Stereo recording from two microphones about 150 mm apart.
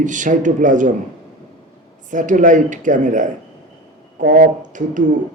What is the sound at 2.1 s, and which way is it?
Speech, 60° right (ahead or behind).